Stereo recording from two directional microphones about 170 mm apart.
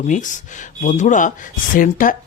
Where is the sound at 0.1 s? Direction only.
50° left (ahead or behind).